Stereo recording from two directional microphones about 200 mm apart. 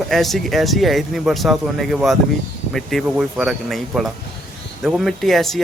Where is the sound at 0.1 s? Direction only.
Centre (ahead or behind).